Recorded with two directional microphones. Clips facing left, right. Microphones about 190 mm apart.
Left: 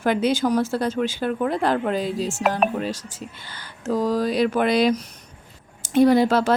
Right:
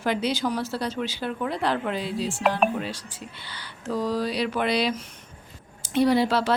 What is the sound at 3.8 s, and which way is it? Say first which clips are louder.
A woman's voice: left 5 dB; 45° left (ahead or behind).